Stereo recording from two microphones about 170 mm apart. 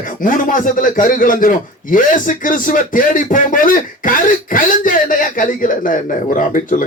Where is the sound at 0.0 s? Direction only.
50° left (ahead or behind).